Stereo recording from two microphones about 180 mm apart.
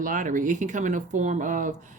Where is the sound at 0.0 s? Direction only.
45° right (ahead or behind).